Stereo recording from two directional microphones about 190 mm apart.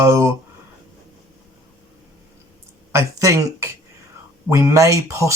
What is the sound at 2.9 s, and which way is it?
Speech, 15° right (ahead or behind).